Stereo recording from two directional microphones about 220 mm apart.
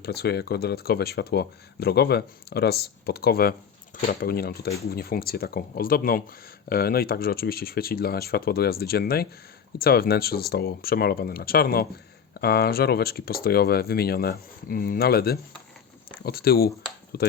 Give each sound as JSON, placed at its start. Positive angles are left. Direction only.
{"t": 0.0, "sound": "speech", "side_deg": 45}